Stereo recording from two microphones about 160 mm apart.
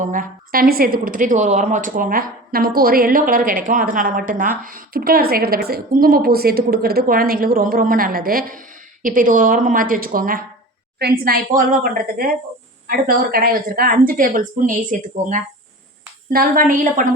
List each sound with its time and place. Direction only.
0.0 s a woman's voice: 55° right (ahead or behind)
11.0 s a woman's voice: 75° right (ahead or behind)